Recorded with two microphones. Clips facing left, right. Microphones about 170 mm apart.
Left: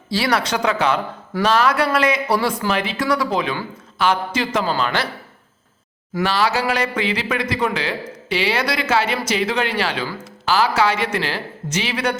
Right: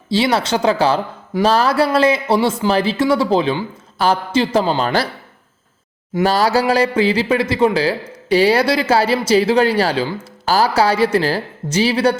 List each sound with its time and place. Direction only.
0.1 s speech: 25° right (ahead or behind)
4.8 s speech: 35° right (ahead or behind)
6.2 s speech: 40° right (ahead or behind)